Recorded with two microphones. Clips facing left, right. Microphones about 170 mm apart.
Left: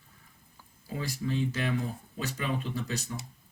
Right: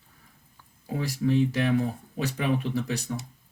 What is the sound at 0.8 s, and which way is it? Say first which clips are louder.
Speech: right 7 dB; 70° right (ahead or behind).